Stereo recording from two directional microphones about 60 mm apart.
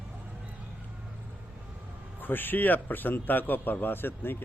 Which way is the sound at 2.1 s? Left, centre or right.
Left.